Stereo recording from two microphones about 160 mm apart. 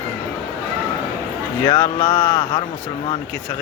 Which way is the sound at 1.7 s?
30° left (ahead or behind).